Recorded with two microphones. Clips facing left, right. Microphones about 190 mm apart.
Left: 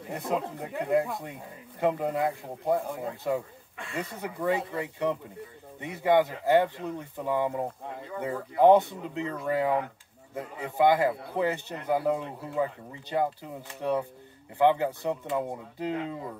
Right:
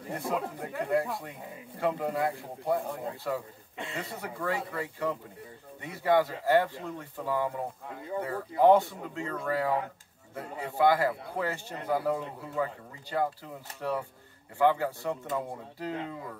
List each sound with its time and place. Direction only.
0.3 s speech: 20° left (ahead or behind)
3.7 s speech: 20° right (ahead or behind)
4.0 s speech: 20° left (ahead or behind)